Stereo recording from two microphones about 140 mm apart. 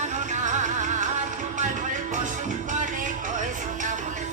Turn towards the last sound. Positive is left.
turn(degrees=-60)  # may be behind; listen again after turning